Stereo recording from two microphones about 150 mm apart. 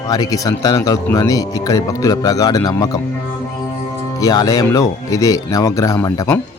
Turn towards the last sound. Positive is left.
turn(degrees=20)  # may be behind; listen again after turning